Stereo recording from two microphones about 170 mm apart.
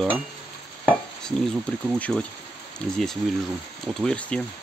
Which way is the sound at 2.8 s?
5° left (ahead or behind).